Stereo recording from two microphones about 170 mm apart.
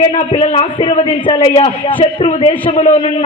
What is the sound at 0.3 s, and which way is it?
A man's voice, 35° left (ahead or behind).